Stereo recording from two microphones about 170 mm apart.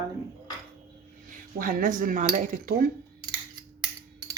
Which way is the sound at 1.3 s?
55° right (ahead or behind).